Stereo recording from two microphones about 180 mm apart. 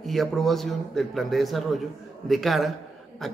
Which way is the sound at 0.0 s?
Centre (ahead or behind).